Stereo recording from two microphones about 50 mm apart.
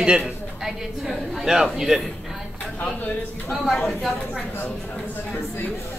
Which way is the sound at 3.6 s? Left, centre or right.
Centre.